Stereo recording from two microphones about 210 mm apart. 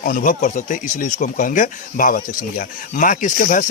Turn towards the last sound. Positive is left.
turn(degrees=40)  # may be behind; listen again after turning